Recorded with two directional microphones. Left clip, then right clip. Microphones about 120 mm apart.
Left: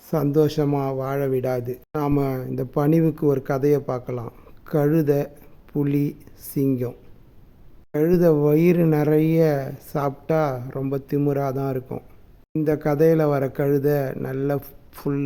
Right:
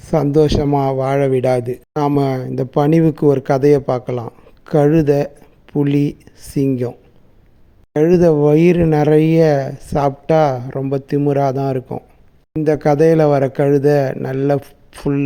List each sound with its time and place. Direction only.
0.1 s speech: 30° right (ahead or behind)
7.9 s speech: 25° right (ahead or behind)